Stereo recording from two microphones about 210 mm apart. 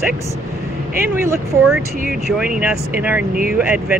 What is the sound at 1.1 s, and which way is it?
Speech, 10° right (ahead or behind).